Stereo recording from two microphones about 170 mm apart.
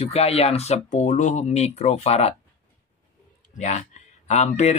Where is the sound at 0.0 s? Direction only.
35° left (ahead or behind).